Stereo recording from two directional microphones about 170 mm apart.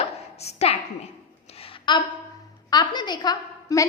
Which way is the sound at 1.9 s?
30° left (ahead or behind).